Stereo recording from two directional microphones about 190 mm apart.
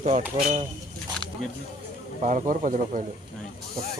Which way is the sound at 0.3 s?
35° right (ahead or behind).